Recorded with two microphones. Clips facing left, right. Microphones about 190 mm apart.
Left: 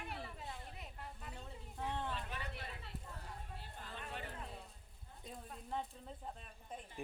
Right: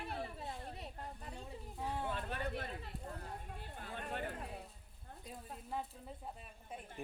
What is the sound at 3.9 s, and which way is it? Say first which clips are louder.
Run: right 6 dB; 50° right (ahead or behind).